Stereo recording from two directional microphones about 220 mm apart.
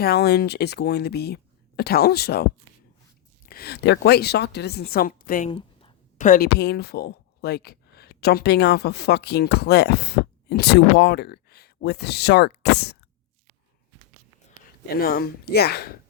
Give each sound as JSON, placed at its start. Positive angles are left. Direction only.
{"t": 0.0, "sound": "speech", "side_deg": 45}
{"t": 5.5, "sound": "speech", "side_deg": 25}
{"t": 14.9, "sound": "speech", "side_deg": 40}